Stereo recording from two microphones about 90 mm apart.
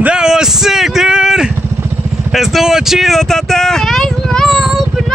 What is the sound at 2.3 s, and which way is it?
Speech, centre (ahead or behind).